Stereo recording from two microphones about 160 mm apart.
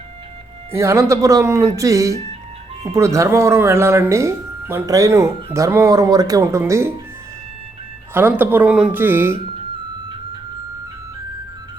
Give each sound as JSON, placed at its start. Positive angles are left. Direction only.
{"t": 0.7, "sound": "speech", "side_deg": -15}
{"t": 8.1, "sound": "speech", "side_deg": -10}